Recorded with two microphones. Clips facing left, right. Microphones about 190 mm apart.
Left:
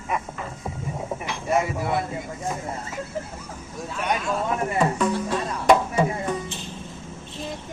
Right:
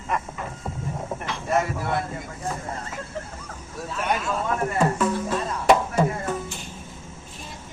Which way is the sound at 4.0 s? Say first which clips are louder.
Left 1 dB; centre (ahead or behind).